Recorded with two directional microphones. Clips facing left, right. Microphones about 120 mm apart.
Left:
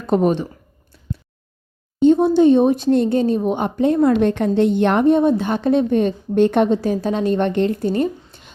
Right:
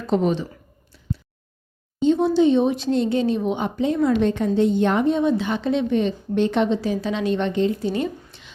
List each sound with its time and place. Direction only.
0.1 s speech: 50° left (ahead or behind)
2.0 s speech: 50° left (ahead or behind)